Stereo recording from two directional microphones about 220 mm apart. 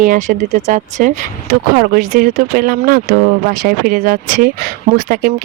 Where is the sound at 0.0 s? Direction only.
35° right (ahead or behind).